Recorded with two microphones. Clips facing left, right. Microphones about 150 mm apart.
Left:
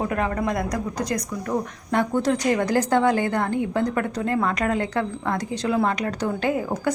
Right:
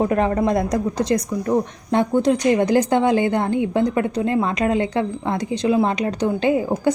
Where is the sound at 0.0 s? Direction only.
30° right (ahead or behind).